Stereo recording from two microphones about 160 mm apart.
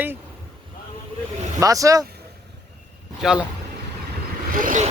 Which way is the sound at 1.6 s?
20° right (ahead or behind).